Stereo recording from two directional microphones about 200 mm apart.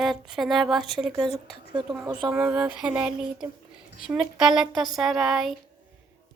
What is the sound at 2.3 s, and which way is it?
Speech, 5° right (ahead or behind).